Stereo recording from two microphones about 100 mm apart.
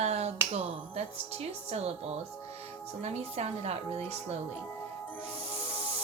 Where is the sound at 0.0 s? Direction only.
90° right.